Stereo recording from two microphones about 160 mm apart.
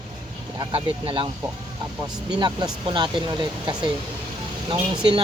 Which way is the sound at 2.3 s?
25° right (ahead or behind).